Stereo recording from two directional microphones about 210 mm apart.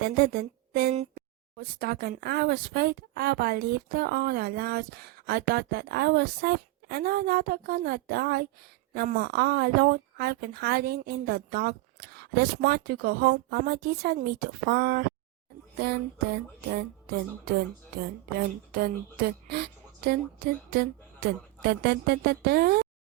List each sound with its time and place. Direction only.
0.0 s speech: 45° right (ahead or behind)
19.2 s speech: 45° right (ahead or behind)